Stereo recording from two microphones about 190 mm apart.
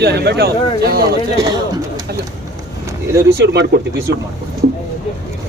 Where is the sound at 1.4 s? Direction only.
20° right (ahead or behind).